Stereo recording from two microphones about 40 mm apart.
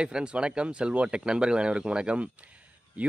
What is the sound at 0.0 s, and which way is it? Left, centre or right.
Speech, right.